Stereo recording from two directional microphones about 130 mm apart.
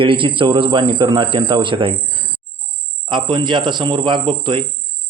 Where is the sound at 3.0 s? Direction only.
35° right (ahead or behind).